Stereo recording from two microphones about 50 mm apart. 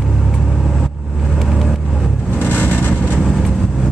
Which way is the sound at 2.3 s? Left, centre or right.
Left.